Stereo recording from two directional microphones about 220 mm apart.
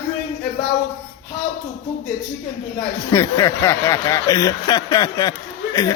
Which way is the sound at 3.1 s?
15° left (ahead or behind).